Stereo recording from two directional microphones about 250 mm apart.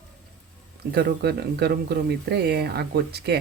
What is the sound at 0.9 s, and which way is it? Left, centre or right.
Speech, right.